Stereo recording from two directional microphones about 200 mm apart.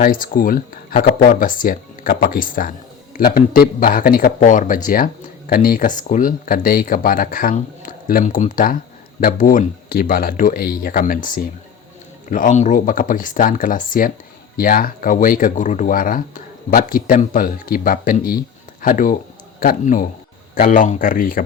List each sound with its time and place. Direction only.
0.0 s speech: 45° left (ahead or behind)